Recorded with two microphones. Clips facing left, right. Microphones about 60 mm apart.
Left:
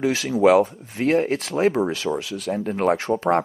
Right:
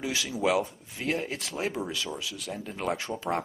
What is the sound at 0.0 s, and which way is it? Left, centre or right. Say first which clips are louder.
Speech: left 11 dB; left.